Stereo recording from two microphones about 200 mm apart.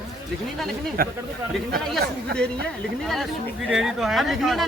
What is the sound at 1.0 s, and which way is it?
Speech, 50° right (ahead or behind).